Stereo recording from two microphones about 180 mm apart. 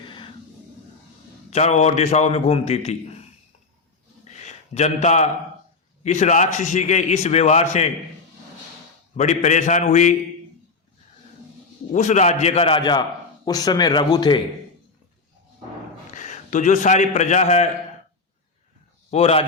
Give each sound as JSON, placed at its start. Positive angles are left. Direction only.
{"t": 0.0, "sound": "a sound", "side_deg": 25}
{"t": 1.5, "sound": "a man's voice", "side_deg": 40}
{"t": 4.4, "sound": "a man's voice", "side_deg": 40}
{"t": 9.1, "sound": "a man's voice", "side_deg": 40}
{"t": 11.9, "sound": "a man's voice", "side_deg": 40}
{"t": 16.1, "sound": "a man's voice", "side_deg": 45}
{"t": 19.1, "sound": "a man's voice", "side_deg": 35}